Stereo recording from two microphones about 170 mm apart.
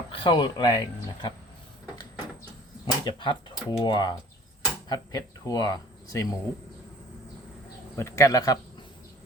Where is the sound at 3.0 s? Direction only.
25° left (ahead or behind).